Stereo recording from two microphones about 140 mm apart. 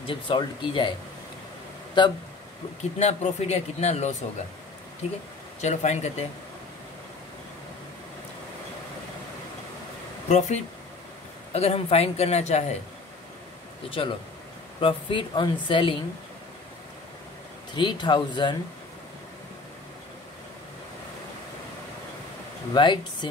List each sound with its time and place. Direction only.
0.0 s speech: 35° left (ahead or behind)
2.0 s speech: 35° left (ahead or behind)
3.0 s speech: 50° left (ahead or behind)
5.6 s speech: 55° left (ahead or behind)
10.2 s speech: 55° left (ahead or behind)
13.8 s speech: 40° left (ahead or behind)
17.7 s speech: 30° left (ahead or behind)
22.8 s speech: 35° left (ahead or behind)